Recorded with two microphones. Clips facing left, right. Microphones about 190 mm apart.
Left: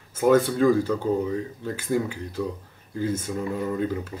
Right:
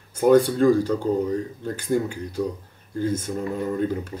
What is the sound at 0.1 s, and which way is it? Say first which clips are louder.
Speech: right 3 dB; centre (ahead or behind).